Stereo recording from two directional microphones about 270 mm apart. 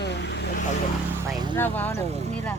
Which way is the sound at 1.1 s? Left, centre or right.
Centre.